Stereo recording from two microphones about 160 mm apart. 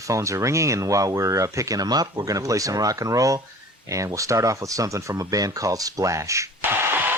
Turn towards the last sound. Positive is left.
turn(degrees=-15)  # may be behind; listen again after turning